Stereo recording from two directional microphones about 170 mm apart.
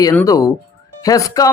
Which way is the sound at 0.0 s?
15° left (ahead or behind).